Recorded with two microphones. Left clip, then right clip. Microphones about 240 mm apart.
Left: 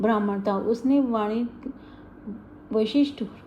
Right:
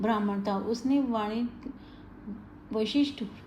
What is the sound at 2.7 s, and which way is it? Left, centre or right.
Speech, centre.